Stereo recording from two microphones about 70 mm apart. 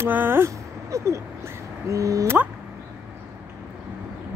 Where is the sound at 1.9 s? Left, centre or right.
Right.